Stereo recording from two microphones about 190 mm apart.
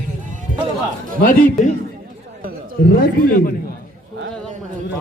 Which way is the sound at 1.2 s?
40° left (ahead or behind).